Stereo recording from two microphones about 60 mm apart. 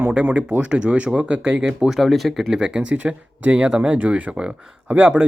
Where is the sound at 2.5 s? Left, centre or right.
Centre.